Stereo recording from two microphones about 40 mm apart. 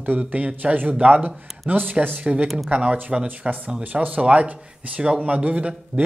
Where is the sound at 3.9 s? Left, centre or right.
Right.